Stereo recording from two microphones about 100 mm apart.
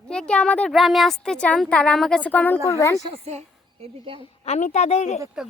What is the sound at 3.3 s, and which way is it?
Speech, 90° right.